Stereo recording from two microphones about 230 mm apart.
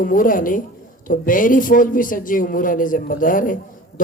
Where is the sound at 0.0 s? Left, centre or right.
Left.